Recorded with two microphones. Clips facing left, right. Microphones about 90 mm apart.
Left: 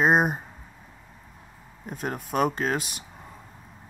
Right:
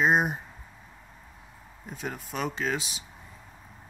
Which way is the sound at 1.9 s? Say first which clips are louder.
Left 5 dB; 50° left (ahead or behind).